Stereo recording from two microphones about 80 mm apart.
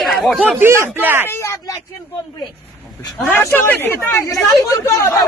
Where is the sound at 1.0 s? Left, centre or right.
Right.